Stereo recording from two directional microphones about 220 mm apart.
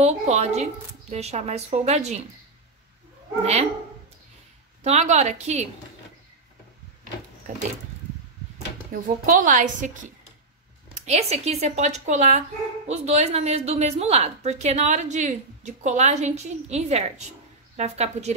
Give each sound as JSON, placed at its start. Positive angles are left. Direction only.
{"t": 0.0, "sound": "a woman's voice", "side_deg": -30}
{"t": 4.8, "sound": "speech", "side_deg": -30}
{"t": 8.9, "sound": "speech", "side_deg": -35}
{"t": 11.0, "sound": "speech", "side_deg": -30}